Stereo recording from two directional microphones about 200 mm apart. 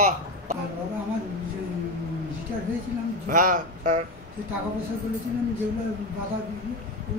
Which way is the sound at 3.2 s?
40° right (ahead or behind).